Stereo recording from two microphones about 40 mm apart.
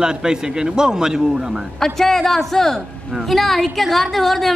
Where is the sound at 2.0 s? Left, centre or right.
Centre.